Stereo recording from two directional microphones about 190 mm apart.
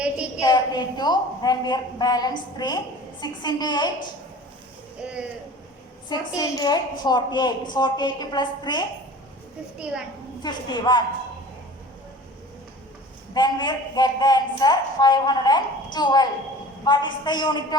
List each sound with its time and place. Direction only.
0.3 s a woman's voice: 20° left (ahead or behind)
6.1 s a woman's voice: 20° left (ahead or behind)
10.4 s a woman's voice: 20° left (ahead or behind)
13.3 s a woman's voice: 25° left (ahead or behind)